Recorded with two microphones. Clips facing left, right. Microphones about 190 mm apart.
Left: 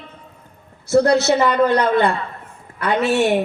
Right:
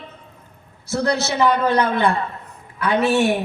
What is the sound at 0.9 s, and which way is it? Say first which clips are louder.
A woman's voice: left 7 dB; 60° left (ahead or behind).